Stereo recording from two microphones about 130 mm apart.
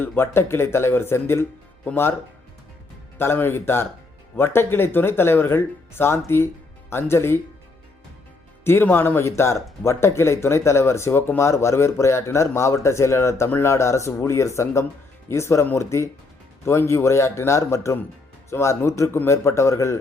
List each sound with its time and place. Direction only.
0.0 s speech: 15° left (ahead or behind)
3.2 s speech: 15° left (ahead or behind)
8.6 s speech: 15° left (ahead or behind)